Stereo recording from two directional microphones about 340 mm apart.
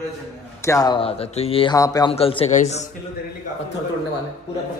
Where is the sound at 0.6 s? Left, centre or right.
Centre.